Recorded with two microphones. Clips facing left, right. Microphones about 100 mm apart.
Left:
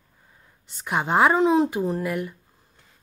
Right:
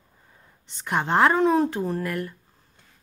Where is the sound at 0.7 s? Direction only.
5° left (ahead or behind).